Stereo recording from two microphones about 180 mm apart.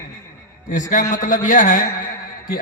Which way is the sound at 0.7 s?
45° left (ahead or behind).